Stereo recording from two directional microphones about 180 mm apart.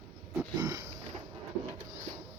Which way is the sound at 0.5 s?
20° right (ahead or behind).